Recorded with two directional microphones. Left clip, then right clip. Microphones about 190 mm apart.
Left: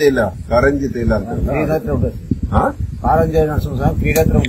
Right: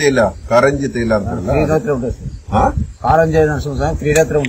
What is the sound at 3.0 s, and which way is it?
Speech, 15° left (ahead or behind).